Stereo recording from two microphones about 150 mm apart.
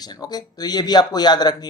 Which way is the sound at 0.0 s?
25° left (ahead or behind).